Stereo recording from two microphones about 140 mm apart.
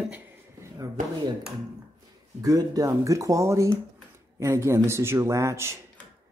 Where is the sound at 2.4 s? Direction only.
25° right (ahead or behind).